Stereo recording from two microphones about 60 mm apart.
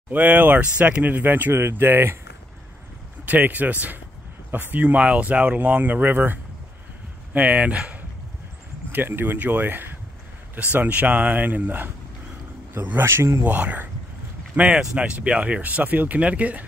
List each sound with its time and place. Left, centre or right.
0.1 s speech: right
0.6 s speech: right
1.5 s speech: right
3.3 s speech: right
8.9 s speech: right
13.0 s speech: right
13.4 s speech: right